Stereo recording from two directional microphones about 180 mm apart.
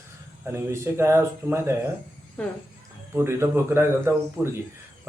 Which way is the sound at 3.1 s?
15° right (ahead or behind).